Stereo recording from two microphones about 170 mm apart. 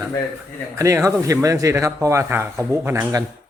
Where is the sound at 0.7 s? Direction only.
20° right (ahead or behind).